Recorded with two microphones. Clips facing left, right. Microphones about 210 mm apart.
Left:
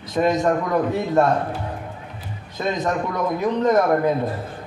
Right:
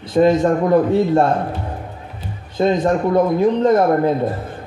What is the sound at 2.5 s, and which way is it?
A man's voice, 30° right (ahead or behind).